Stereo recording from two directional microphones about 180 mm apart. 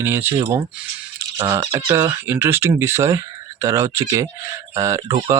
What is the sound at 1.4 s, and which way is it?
Speech, 15° right (ahead or behind).